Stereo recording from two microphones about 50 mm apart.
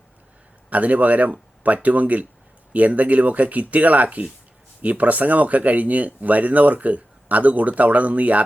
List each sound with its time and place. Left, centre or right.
0.7 s speech: right